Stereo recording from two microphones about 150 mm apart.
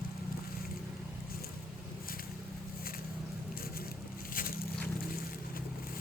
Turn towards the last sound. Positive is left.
turn(degrees=70)  # may be behind; listen again after turning